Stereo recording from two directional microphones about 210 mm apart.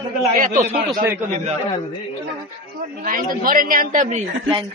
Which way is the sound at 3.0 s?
40° right (ahead or behind).